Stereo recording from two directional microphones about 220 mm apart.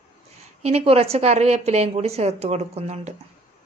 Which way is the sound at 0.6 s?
30° right (ahead or behind).